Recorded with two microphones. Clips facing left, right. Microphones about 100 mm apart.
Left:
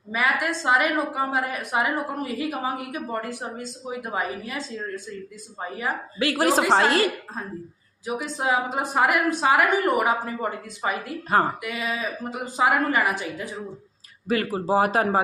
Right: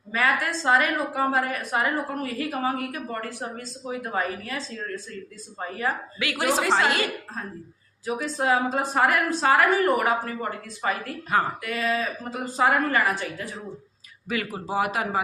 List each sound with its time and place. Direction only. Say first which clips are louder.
0.1 s a woman's voice: even; 15° left (ahead or behind)
6.1 s a man's voice: left 6 dB; 35° left (ahead or behind)
8.0 s a woman's voice: right 1 dB; 15° left (ahead or behind)
14.3 s a man's voice: left 6 dB; 35° left (ahead or behind)